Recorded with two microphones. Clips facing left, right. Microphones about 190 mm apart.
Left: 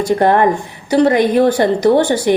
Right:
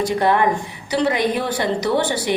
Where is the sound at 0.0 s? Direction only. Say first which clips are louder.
Left 5 dB; 50° left (ahead or behind).